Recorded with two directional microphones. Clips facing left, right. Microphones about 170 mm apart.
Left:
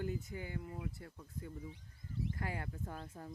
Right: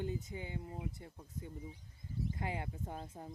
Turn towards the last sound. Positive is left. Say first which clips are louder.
# right 1 dB
turn(degrees=-20)  # may be behind; listen again after turning